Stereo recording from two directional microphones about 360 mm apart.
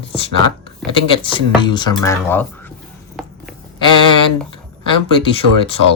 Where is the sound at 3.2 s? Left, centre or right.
Centre.